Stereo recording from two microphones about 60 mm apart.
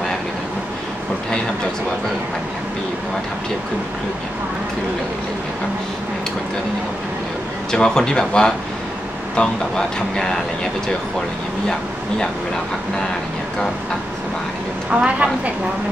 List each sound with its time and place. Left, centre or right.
7.7 s speech: centre
14.9 s a woman's voice: centre